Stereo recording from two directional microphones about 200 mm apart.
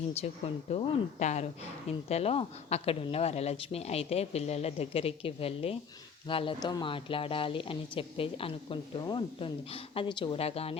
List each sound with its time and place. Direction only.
0.1 s speech: 30° left (ahead or behind)